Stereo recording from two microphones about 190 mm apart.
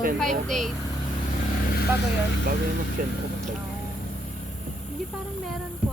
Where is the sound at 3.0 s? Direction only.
45° right (ahead or behind).